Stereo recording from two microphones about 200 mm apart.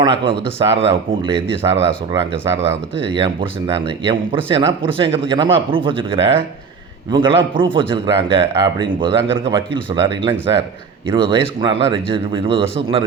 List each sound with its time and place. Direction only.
0.0 s speech: 25° right (ahead or behind)